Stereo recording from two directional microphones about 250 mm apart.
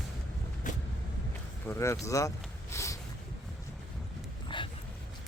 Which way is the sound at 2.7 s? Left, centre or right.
Centre.